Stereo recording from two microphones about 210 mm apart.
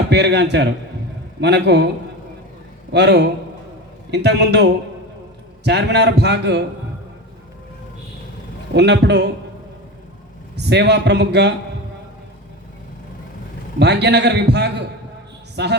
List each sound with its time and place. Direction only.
0.1 s a man's voice: 55° right (ahead or behind)
2.9 s a man's voice: 55° right (ahead or behind)
8.7 s a man's voice: 55° right (ahead or behind)
10.6 s a man's voice: 55° right (ahead or behind)
13.7 s a man's voice: 55° right (ahead or behind)